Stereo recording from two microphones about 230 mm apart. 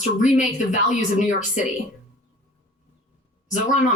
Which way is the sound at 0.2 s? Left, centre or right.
Left.